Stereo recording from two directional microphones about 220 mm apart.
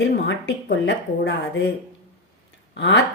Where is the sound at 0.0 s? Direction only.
55° left (ahead or behind).